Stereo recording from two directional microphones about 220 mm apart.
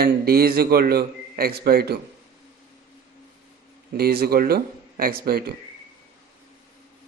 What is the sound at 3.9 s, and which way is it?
A man's voice, 45° right (ahead or behind).